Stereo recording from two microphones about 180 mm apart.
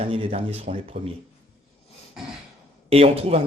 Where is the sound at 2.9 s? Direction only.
30° right (ahead or behind).